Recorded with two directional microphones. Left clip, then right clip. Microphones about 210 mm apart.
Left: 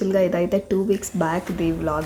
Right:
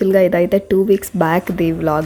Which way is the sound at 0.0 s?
20° right (ahead or behind).